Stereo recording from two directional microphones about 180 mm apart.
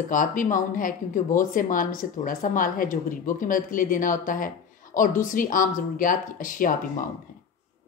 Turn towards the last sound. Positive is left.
turn(degrees=50)  # may be behind; listen again after turning